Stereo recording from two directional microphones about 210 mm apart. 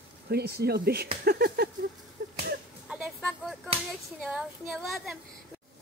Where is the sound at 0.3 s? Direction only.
50° right (ahead or behind).